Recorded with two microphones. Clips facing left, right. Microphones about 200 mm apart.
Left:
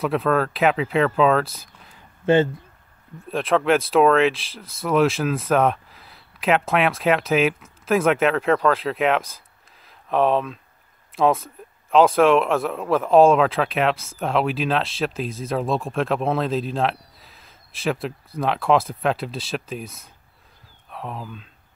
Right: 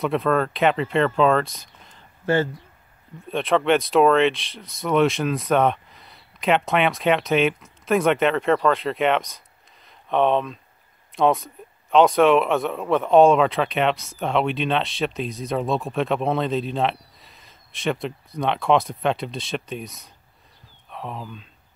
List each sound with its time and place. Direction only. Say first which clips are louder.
0.0 s speech: even; centre (ahead or behind)
2.2 s speech: left 4 dB; 20° left (ahead or behind)
3.2 s speech: even; centre (ahead or behind)